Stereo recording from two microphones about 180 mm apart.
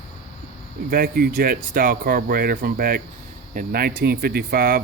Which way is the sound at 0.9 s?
55° right (ahead or behind).